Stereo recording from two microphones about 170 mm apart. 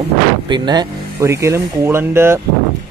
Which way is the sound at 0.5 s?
25° right (ahead or behind).